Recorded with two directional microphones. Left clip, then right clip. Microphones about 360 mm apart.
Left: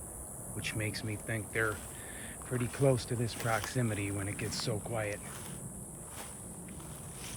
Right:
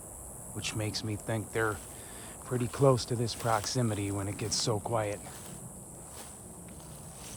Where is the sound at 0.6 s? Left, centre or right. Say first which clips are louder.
Right 2 dB; centre.